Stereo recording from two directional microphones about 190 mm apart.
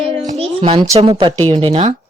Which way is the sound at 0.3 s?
30° right (ahead or behind).